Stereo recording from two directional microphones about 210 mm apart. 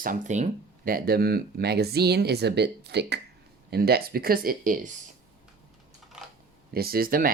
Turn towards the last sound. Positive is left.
turn(degrees=-45)  # may be behind; listen again after turning